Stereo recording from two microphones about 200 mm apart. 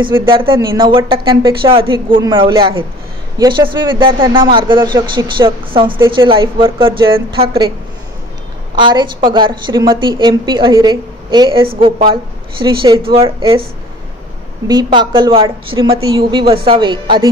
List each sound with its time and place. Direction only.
0.2 s a woman's voice: 25° right (ahead or behind)
8.7 s a woman's voice: 25° right (ahead or behind)
14.7 s a woman's voice: 20° right (ahead or behind)